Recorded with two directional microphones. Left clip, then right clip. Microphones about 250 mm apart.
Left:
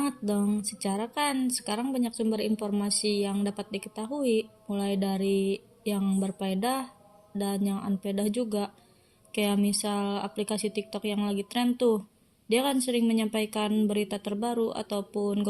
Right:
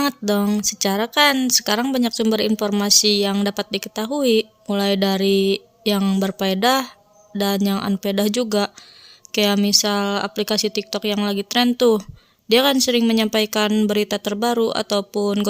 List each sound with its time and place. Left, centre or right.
0.0 s speech: right